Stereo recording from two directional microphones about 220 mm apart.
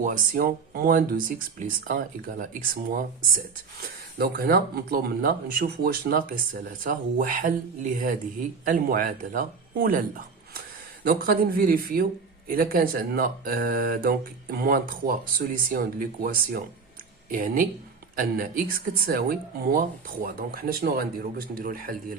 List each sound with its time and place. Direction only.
0.0 s speech: 40° right (ahead or behind)